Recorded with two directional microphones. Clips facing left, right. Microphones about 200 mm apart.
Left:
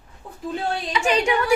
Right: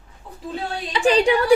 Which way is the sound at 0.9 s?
30° right (ahead or behind).